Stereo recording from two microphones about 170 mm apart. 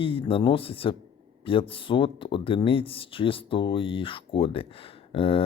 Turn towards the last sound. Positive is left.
turn(degrees=35)  # may be behind; listen again after turning